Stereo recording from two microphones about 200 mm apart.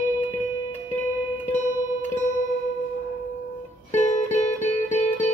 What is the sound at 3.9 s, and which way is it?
Music, 35° left (ahead or behind).